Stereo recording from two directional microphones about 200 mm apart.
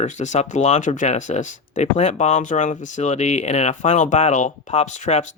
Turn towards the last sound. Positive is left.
turn(degrees=35)  # may be behind; listen again after turning